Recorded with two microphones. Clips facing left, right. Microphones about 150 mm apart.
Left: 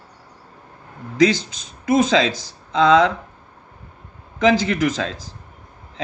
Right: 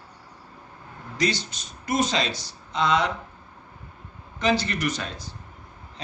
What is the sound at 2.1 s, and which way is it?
Speech, 90° left.